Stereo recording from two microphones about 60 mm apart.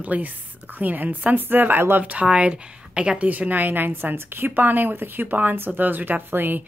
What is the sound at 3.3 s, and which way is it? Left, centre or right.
A woman's voice, right.